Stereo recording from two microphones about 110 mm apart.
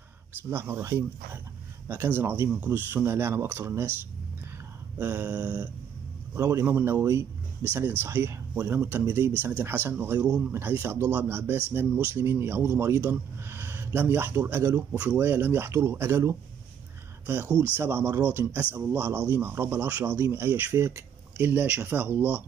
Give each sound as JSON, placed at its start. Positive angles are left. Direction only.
{"t": 0.5, "sound": "speech", "side_deg": -20}
{"t": 4.9, "sound": "a sound", "side_deg": -20}
{"t": 6.3, "sound": "speech", "side_deg": -25}
{"t": 17.7, "sound": "speech", "side_deg": -20}